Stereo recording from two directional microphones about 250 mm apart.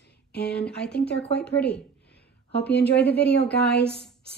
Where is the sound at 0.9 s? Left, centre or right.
Left.